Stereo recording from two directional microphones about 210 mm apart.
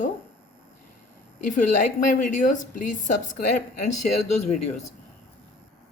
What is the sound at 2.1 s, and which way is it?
Speech, 35° left (ahead or behind).